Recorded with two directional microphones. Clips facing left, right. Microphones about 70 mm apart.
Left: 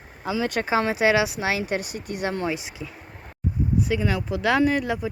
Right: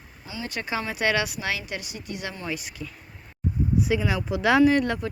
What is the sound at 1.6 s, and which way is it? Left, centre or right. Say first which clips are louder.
Speech: left 7 dB; left.